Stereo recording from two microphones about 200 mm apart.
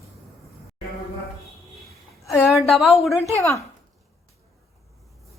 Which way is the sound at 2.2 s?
15° left (ahead or behind).